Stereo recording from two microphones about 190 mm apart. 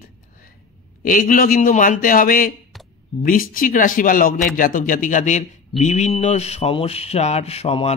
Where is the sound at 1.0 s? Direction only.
45° left (ahead or behind).